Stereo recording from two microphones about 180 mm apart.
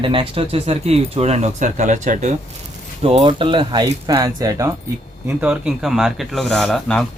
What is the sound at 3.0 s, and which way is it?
Speech, 30° right (ahead or behind).